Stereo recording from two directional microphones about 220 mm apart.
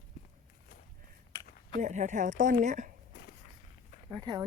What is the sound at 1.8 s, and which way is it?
A woman's voice, 35° right (ahead or behind).